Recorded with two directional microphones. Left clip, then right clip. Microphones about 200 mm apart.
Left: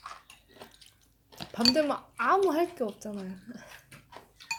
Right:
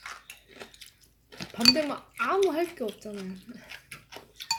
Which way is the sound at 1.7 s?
35° left (ahead or behind).